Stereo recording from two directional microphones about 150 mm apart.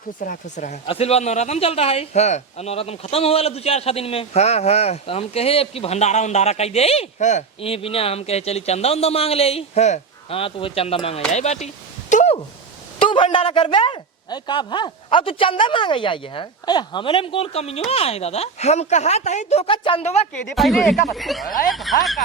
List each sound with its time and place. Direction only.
0.2 s speech: 55° left (ahead or behind); by 11.2 s 40° left (ahead or behind)
11.3 s a sound: 50° left (ahead or behind)
13.0 s a sound: 35° left (ahead or behind)
13.3 s speech: 35° left (ahead or behind)
20.6 s speech: centre (ahead or behind)
21.4 s speech: 65° left (ahead or behind)
21.7 s speech: centre (ahead or behind)